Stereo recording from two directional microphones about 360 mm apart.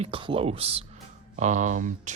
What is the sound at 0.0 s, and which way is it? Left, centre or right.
Speech, centre.